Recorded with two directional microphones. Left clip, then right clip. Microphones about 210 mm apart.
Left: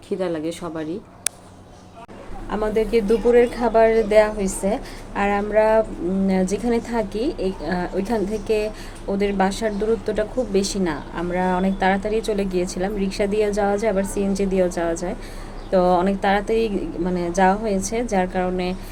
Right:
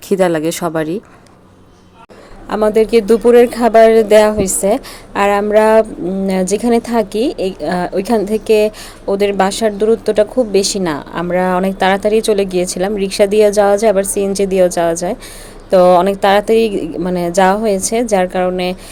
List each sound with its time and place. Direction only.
0.1 s speech: 55° right (ahead or behind)
2.5 s speech: 50° right (ahead or behind)